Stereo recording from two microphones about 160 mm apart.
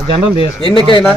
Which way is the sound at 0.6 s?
30° right (ahead or behind).